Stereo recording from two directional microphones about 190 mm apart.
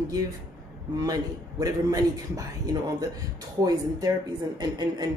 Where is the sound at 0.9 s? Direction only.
20° right (ahead or behind).